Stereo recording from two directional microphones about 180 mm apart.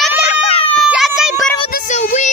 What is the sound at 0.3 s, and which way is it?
Baby cry, 30° left (ahead or behind).